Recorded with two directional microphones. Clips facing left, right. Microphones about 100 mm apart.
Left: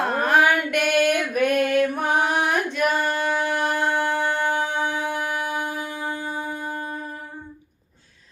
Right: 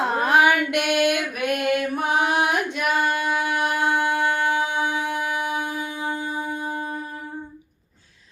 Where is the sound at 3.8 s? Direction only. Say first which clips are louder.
Right 1 dB; 15° right (ahead or behind).